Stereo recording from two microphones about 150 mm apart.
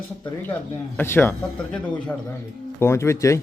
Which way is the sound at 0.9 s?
15° left (ahead or behind).